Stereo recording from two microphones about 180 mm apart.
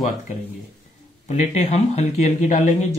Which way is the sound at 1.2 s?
40° left (ahead or behind).